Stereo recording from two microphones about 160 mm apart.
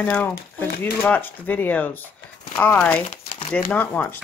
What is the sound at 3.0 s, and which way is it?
Crumpling, 35° left (ahead or behind).